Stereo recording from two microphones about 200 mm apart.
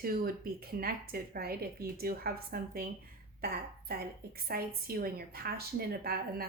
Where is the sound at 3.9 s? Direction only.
50° right (ahead or behind).